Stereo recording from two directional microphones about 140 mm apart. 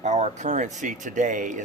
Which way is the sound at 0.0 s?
55° right (ahead or behind).